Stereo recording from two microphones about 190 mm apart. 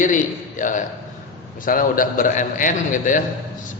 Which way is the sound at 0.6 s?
40° left (ahead or behind).